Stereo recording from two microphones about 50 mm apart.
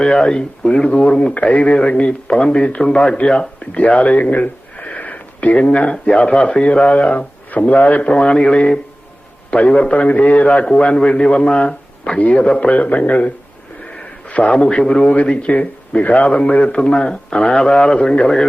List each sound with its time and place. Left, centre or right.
0.0 s speech: centre; by 8.0 s left
8.0 s speech: centre
14.3 s a sound: left
14.5 s a man's voice: centre
15.0 s speech: left